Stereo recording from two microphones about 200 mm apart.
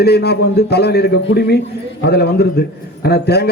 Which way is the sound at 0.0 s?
55° left (ahead or behind).